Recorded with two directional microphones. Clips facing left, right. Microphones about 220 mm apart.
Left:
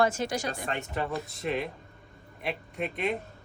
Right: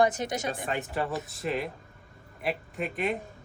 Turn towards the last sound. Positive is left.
turn(degrees=0)  # may be behind; listen again after turning